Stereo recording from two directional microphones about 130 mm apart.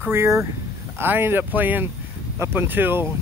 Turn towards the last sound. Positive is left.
turn(degrees=-15)  # may be behind; listen again after turning